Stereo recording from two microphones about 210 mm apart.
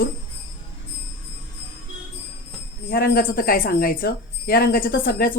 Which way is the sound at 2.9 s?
45° left (ahead or behind).